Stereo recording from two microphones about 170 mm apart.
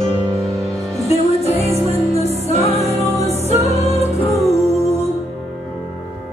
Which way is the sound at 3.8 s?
40° left (ahead or behind).